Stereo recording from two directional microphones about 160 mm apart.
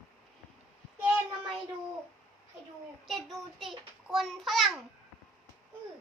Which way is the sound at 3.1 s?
Centre (ahead or behind).